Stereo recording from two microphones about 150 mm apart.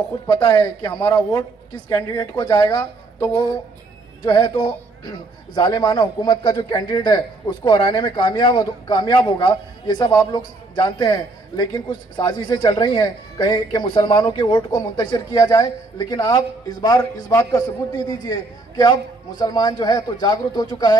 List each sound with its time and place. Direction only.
0.3 s a man's voice: 30° left (ahead or behind)
2.8 s speech: 10° left (ahead or behind)
4.2 s a man's voice: 30° left (ahead or behind)